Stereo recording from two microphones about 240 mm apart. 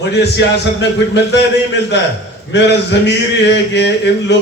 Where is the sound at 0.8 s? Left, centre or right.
Left.